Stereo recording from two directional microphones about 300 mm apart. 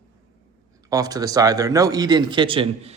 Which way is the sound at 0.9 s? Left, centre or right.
Centre.